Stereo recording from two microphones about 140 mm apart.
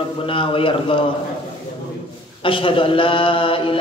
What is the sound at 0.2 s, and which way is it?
Mantra, 40° left (ahead or behind).